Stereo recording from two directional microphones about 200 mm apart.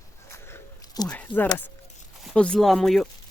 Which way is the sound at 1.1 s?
5° left (ahead or behind).